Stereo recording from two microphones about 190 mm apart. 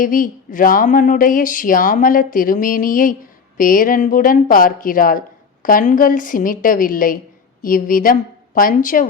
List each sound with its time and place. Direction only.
0.0 s a woman's voice: 45° left (ahead or behind)